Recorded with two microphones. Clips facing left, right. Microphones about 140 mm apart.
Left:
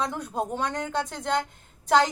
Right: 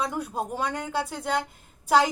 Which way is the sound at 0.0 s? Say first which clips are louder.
Even; 10° right (ahead or behind).